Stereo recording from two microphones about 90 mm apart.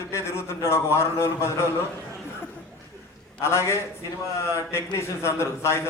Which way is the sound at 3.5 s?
30° left (ahead or behind).